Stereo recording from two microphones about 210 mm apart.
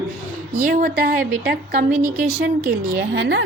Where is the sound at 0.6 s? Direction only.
40° right (ahead or behind).